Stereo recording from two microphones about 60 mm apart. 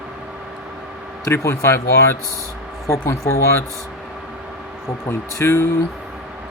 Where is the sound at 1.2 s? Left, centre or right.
Left.